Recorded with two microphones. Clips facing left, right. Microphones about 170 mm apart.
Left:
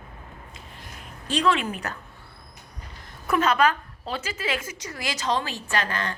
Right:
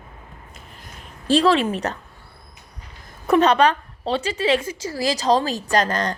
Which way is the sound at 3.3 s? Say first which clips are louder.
Right 6 dB; 35° right (ahead or behind).